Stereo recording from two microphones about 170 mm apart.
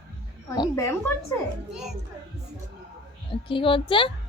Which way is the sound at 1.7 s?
5° right (ahead or behind).